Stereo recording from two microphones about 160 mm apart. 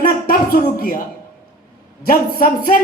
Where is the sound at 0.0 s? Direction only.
65° left (ahead or behind).